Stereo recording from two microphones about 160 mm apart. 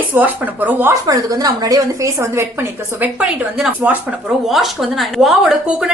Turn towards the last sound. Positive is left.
turn(degrees=-5)  # may be behind; listen again after turning